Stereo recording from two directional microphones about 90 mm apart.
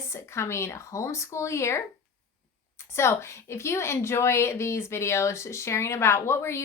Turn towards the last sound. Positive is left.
turn(degrees=30)  # may be behind; listen again after turning